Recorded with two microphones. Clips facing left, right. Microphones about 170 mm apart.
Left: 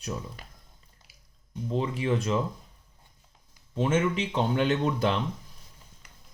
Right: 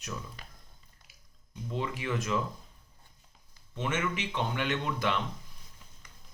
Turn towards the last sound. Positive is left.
turn(degrees=35)  # may be behind; listen again after turning